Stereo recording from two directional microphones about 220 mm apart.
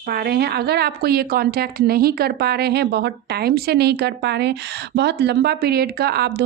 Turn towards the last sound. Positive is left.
turn(degrees=-50)  # may be behind; listen again after turning